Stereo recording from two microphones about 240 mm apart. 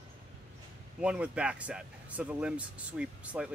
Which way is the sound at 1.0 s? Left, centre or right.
Centre.